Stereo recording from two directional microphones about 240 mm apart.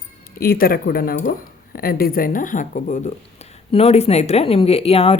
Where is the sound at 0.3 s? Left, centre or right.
Left.